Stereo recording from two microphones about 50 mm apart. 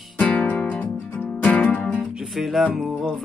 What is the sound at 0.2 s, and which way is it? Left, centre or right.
Music, left.